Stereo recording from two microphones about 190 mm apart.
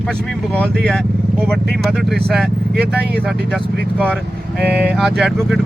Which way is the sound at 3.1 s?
Centre (ahead or behind).